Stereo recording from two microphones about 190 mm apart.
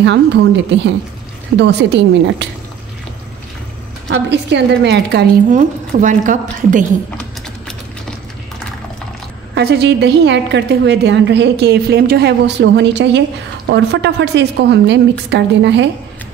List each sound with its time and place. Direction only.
0.0 s a woman's voice: 70° right (ahead or behind)
4.1 s a woman's voice: 65° right (ahead or behind)
5.5 s a woman's voice: 40° right (ahead or behind)
9.6 s a woman's voice: 60° right (ahead or behind)